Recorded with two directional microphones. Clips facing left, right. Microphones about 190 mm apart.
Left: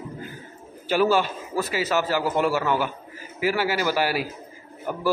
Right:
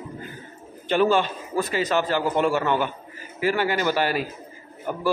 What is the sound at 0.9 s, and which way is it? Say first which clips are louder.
A man's voice: right 1 dB; 5° left (ahead or behind).